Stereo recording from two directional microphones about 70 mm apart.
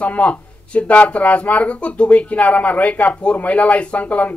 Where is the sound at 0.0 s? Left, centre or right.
Centre.